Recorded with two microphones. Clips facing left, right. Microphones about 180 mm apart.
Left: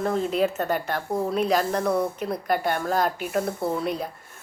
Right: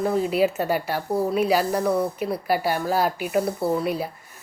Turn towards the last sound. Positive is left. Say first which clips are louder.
# right 3 dB
turn(degrees=-5)  # may be behind; listen again after turning